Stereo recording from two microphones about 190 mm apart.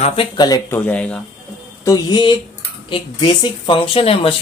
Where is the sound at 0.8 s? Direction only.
5° left (ahead or behind).